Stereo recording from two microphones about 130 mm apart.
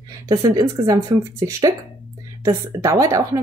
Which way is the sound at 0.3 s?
30° right (ahead or behind).